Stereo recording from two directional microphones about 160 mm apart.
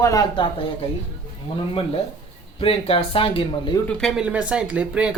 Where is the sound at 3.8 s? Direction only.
5° left (ahead or behind).